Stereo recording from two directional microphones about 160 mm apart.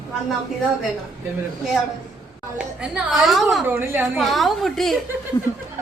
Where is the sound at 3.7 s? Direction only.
15° right (ahead or behind).